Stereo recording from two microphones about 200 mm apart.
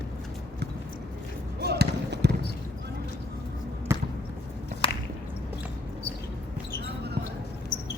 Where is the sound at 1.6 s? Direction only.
55° right (ahead or behind).